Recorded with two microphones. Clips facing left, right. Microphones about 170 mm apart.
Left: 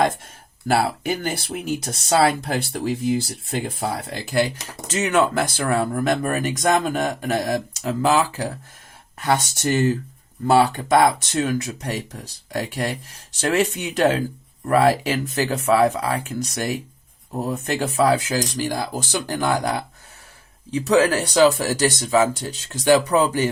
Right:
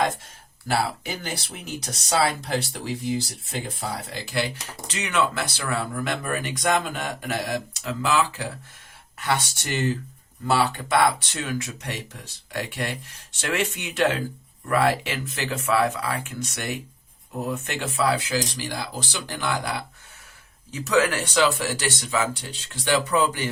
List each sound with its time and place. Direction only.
0.7 s speech: 55° left (ahead or behind)
20.7 s speech: 30° left (ahead or behind)